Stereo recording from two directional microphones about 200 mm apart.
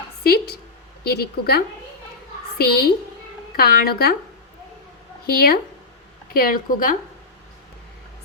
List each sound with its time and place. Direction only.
0.3 s a woman's voice: 50° left (ahead or behind)
5.2 s a woman's voice: 50° left (ahead or behind)